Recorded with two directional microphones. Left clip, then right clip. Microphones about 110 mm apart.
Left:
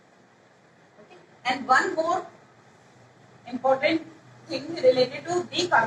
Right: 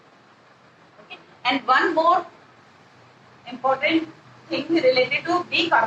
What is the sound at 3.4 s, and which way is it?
A woman's voice, 35° right (ahead or behind).